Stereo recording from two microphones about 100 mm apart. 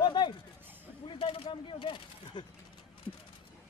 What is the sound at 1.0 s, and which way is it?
Speech, 65° left (ahead or behind).